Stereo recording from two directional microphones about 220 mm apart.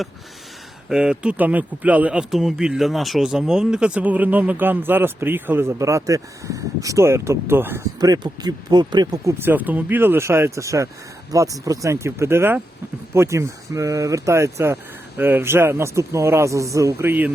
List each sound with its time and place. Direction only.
0.9 s speech: 5° right (ahead or behind)